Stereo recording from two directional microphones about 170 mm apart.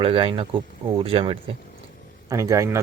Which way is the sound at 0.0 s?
30° right (ahead or behind).